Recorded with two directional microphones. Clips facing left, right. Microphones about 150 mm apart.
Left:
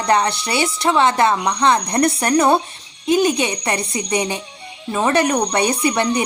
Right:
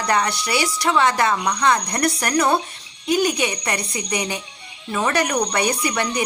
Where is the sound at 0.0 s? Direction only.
25° left (ahead or behind).